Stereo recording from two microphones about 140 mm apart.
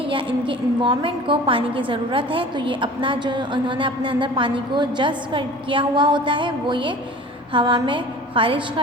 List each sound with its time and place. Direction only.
0.1 s a woman's voice: 35° right (ahead or behind)